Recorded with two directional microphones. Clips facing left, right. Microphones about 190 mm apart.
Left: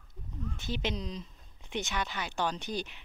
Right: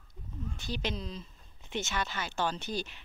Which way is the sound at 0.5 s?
20° left (ahead or behind).